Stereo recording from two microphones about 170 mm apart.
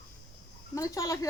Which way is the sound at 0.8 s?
20° left (ahead or behind).